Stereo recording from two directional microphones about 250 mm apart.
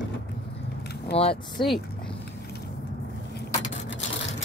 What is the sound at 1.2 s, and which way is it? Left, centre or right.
Speech, left.